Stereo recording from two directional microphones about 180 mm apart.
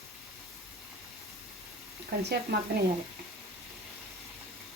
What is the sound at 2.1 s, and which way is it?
Speech, 60° right (ahead or behind).